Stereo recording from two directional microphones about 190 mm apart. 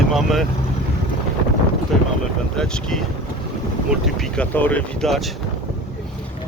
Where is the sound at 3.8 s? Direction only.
Centre (ahead or behind).